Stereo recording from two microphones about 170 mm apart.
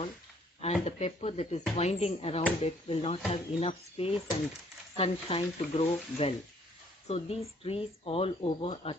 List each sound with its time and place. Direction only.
0.6 s speech: 40° left (ahead or behind)